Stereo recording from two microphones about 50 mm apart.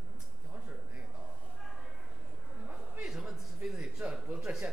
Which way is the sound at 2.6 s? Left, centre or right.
Right.